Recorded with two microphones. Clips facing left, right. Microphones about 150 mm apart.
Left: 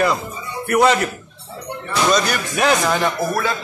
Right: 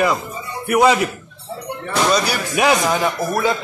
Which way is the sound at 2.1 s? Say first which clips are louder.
Even; 10° right (ahead or behind).